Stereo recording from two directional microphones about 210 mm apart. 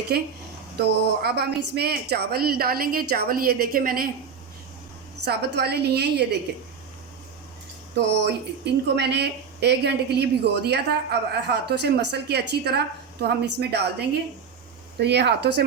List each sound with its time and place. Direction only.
0.1 s speech: 50° right (ahead or behind)
5.2 s speech: 50° right (ahead or behind)
7.9 s speech: 55° right (ahead or behind)
14.9 s speech: 55° right (ahead or behind)